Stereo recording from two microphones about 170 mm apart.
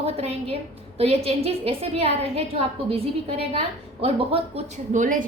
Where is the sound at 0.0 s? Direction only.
35° right (ahead or behind).